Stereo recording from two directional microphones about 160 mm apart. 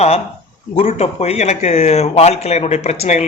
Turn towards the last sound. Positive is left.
turn(degrees=45)  # may be behind; listen again after turning